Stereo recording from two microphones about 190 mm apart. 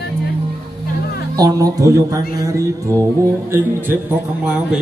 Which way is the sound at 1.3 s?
20° right (ahead or behind).